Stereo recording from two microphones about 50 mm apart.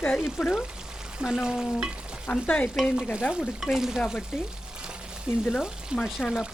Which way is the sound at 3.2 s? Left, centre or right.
Left.